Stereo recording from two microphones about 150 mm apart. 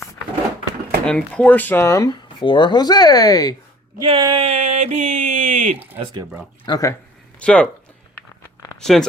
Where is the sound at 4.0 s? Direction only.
30° right (ahead or behind).